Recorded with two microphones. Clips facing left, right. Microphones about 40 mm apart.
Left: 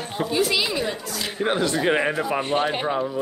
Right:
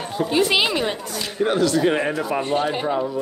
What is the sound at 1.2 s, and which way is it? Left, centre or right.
Speech, centre.